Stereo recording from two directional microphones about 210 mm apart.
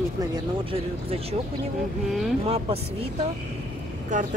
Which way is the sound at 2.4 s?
30° right (ahead or behind).